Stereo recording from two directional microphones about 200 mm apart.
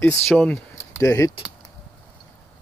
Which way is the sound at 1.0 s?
15° left (ahead or behind).